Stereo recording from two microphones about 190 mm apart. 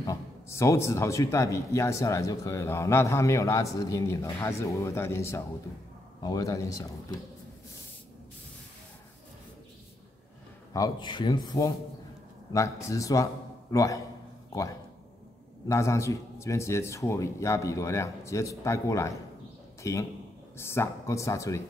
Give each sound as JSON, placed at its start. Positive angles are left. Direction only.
{"t": 0.0, "sound": "speech", "side_deg": 15}
{"t": 10.7, "sound": "speech", "side_deg": 20}
{"t": 15.7, "sound": "a man's voice", "side_deg": 15}